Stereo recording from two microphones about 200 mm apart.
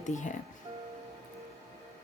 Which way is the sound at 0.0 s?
40° left (ahead or behind).